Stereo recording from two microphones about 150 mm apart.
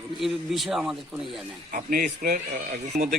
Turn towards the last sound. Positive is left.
turn(degrees=-55)  # may be behind; listen again after turning